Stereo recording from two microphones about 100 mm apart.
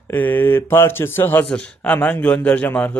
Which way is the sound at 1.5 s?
10° left (ahead or behind).